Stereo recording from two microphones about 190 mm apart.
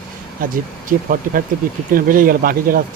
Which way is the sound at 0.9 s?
50° right (ahead or behind).